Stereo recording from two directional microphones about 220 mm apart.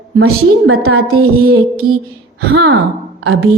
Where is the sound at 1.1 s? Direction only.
75° right (ahead or behind).